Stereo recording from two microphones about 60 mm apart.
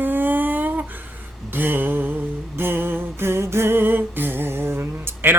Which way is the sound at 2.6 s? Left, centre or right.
Right.